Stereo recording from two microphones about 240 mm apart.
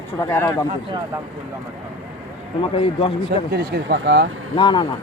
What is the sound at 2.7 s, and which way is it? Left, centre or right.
Speech, left.